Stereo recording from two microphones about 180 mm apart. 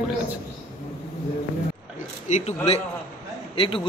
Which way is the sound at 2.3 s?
40° left (ahead or behind).